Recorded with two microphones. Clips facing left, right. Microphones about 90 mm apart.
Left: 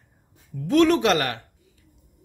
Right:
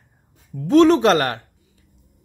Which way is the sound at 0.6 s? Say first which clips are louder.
Right 5 dB; 30° right (ahead or behind).